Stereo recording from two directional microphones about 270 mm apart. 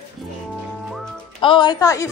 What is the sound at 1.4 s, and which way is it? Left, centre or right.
Speech, centre.